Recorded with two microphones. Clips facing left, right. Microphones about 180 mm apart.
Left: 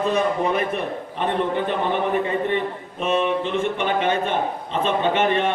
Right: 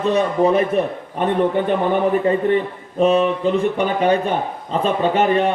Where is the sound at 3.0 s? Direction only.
35° right (ahead or behind).